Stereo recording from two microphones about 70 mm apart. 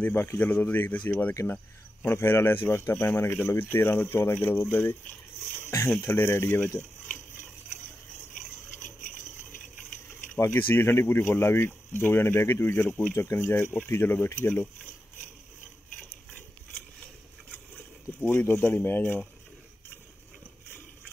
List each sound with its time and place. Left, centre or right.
0.0 s speech: left
2.0 s speech: left
10.4 s speech: left
18.2 s speech: left